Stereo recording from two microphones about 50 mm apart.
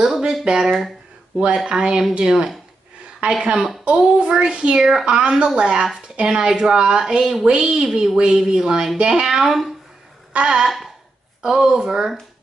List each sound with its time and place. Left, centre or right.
0.0 s a sound: centre
1.4 s speech: centre
3.2 s a child's voice: right; by 12.1 s centre